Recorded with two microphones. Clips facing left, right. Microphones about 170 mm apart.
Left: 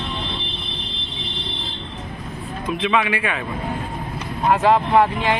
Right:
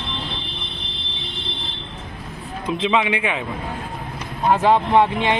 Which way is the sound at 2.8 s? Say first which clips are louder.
Right 1 dB; 20° right (ahead or behind).